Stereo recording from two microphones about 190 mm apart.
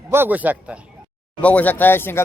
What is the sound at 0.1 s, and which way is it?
Speech, 10° right (ahead or behind).